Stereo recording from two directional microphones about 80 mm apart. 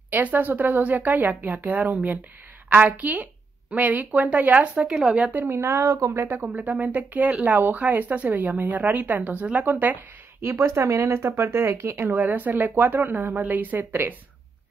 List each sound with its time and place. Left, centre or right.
0.1 s speech: right
5.6 s speech: right
6.2 s speech: right
10.4 s speech: right